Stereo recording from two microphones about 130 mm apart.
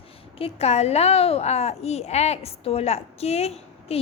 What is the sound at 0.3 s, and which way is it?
A woman's voice, 50° left (ahead or behind).